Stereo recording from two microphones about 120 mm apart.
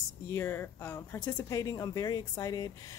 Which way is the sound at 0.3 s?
20° left (ahead or behind).